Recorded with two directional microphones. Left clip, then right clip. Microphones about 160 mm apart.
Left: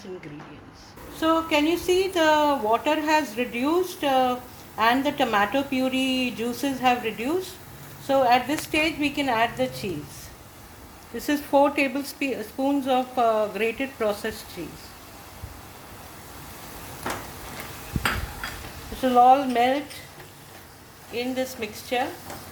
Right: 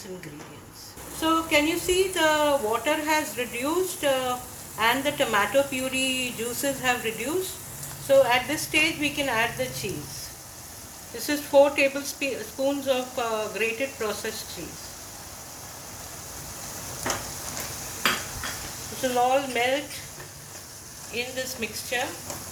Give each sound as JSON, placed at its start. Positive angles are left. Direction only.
{"t": 1.2, "sound": "a woman's voice", "side_deg": 60}
{"t": 11.3, "sound": "speech", "side_deg": 65}
{"t": 19.2, "sound": "a woman's voice", "side_deg": 65}
{"t": 21.2, "sound": "speech", "side_deg": 65}